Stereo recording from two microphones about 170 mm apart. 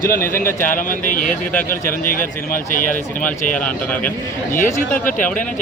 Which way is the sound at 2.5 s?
50° left (ahead or behind).